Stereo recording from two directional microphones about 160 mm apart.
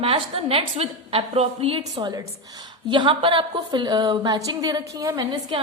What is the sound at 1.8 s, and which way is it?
A woman's voice, 25° right (ahead or behind).